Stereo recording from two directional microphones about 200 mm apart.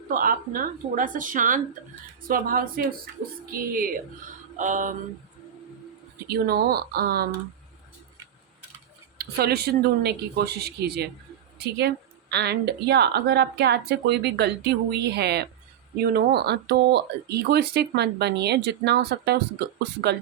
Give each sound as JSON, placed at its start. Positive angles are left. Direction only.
{"t": 0.1, "sound": "speech", "side_deg": -45}
{"t": 4.5, "sound": "mantra", "side_deg": -40}
{"t": 6.2, "sound": "speech", "side_deg": -50}
{"t": 9.1, "sound": "speech", "side_deg": -50}